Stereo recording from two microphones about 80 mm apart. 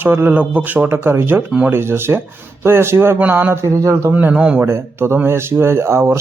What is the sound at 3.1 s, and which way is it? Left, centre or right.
Speech, right.